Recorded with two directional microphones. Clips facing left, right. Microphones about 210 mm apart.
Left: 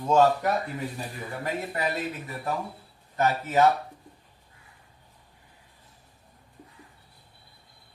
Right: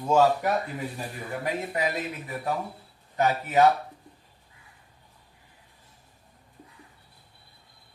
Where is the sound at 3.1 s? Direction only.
15° right (ahead or behind).